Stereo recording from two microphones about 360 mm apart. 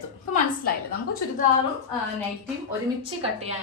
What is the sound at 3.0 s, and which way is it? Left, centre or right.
Speech, centre.